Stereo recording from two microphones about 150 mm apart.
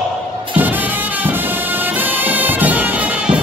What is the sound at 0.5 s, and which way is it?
Music, 10° right (ahead or behind).